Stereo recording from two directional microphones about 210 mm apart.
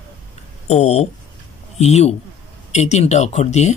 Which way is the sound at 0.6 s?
30° left (ahead or behind).